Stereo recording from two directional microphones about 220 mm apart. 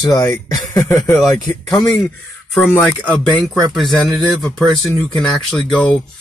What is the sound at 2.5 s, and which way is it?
Speech, 5° left (ahead or behind).